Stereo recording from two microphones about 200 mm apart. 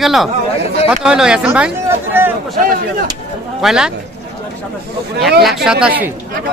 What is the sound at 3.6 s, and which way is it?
Speech, centre (ahead or behind).